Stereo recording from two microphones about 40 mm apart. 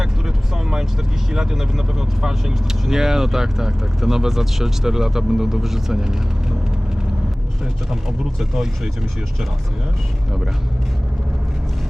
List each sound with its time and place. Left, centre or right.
0.5 s vehicle: centre
1.3 s speech: centre
8.2 s speech: centre